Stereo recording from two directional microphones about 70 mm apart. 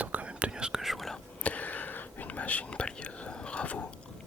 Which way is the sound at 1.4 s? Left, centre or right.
Left.